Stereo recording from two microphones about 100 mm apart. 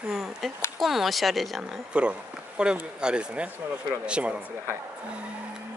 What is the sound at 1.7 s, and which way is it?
Speech, 10° right (ahead or behind).